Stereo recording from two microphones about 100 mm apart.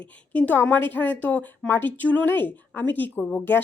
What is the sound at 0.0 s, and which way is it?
Speech, 15° left (ahead or behind).